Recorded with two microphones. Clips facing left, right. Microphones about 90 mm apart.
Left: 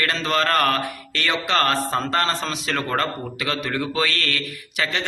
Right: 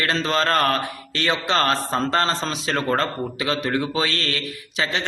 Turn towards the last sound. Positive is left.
turn(degrees=-25)  # may be behind; listen again after turning